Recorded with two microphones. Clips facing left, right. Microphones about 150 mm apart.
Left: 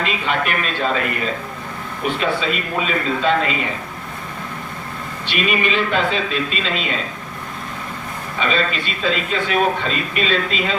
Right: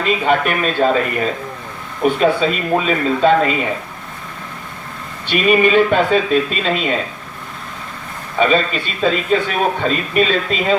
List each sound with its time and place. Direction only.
0.0 s speech: 45° right (ahead or behind)
2.2 s speech: 40° right (ahead or behind)
5.3 s speech: 50° right (ahead or behind)
8.4 s speech: 45° right (ahead or behind)